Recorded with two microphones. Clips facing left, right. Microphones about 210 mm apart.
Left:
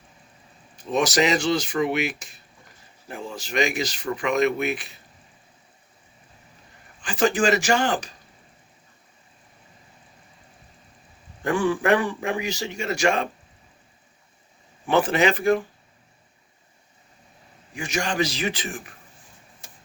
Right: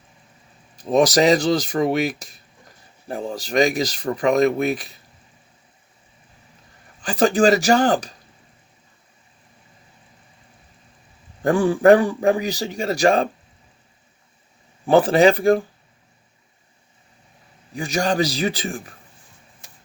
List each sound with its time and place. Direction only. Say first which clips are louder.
0.8 s speech: right 5 dB; 35° right (ahead or behind)
7.0 s speech: right 5 dB; 35° right (ahead or behind)
11.4 s speech: right 7 dB; 35° right (ahead or behind)
14.8 s speech: right 6 dB; 35° right (ahead or behind)
17.7 s speech: right 5 dB; 35° right (ahead or behind)